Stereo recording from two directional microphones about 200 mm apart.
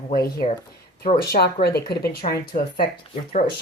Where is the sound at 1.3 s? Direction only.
50° left (ahead or behind).